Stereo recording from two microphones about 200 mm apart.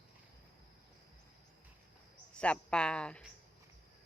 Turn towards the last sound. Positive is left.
turn(degrees=5)  # may be behind; listen again after turning